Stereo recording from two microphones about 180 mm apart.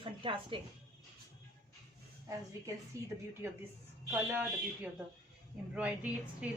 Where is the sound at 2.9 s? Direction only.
15° right (ahead or behind).